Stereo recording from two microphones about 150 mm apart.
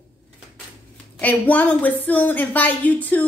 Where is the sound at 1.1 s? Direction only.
10° left (ahead or behind).